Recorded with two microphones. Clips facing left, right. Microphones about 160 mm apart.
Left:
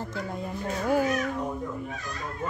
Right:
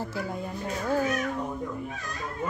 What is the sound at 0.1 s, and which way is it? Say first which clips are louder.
Speech: right 1 dB; 5° right (ahead or behind).